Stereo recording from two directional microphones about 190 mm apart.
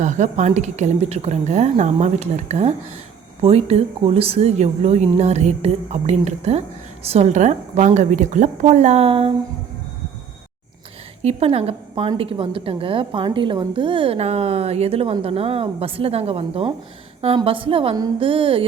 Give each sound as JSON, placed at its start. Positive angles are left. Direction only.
{"t": 0.0, "sound": "a woman's voice", "side_deg": -40}
{"t": 11.2, "sound": "a woman's voice", "side_deg": -35}